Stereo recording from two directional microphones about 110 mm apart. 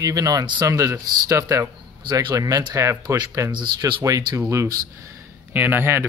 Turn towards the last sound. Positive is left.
turn(degrees=-20)  # may be behind; listen again after turning